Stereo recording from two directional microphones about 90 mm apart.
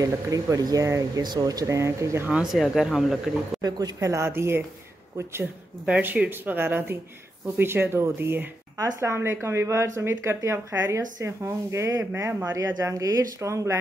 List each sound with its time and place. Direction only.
0.0 s speech: 40° right (ahead or behind)
1.2 s speech: 50° right (ahead or behind); by 2.2 s 35° right (ahead or behind)
2.5 s speech: 5° right (ahead or behind)
3.6 s speech: 45° right (ahead or behind); by 4.6 s 25° right (ahead or behind)
5.9 s speech: 15° right (ahead or behind)
12.5 s speech: 40° right (ahead or behind)